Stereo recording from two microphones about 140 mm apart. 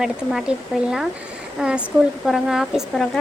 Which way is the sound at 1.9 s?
20° right (ahead or behind).